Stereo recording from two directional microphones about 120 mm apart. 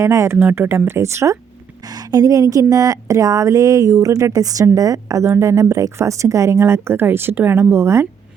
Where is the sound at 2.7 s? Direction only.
30° right (ahead or behind).